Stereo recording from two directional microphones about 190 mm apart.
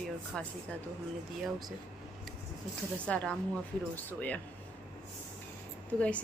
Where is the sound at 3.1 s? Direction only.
5° left (ahead or behind).